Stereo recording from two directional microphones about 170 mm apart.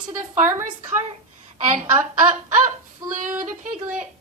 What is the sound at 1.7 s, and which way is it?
Speech, 45° right (ahead or behind).